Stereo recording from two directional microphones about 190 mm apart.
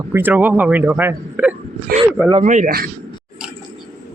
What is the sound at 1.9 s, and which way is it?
Speech, 50° right (ahead or behind).